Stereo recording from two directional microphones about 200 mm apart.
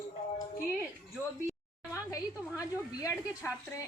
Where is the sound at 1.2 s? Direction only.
15° right (ahead or behind).